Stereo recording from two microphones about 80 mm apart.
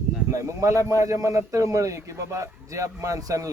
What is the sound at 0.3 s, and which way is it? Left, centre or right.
A man's voice, right.